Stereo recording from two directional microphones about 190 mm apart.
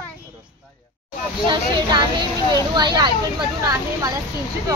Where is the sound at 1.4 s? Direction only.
25° right (ahead or behind).